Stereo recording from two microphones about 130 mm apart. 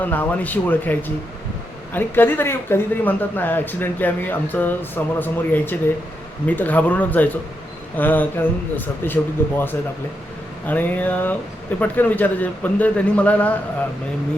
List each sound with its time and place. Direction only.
0.0 s speech: 15° left (ahead or behind)
10.7 s speech: 15° left (ahead or behind)